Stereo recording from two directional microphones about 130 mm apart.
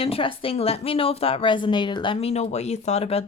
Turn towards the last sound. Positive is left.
turn(degrees=50)  # may be behind; listen again after turning